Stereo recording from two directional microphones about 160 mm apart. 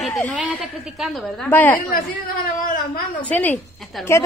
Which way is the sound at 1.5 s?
10° left (ahead or behind).